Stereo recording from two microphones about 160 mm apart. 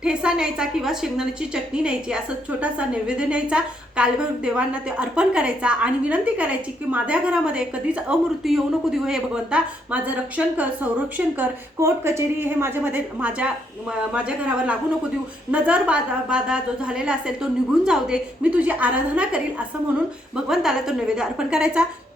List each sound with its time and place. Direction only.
0.0 s a woman's voice: 5° right (ahead or behind)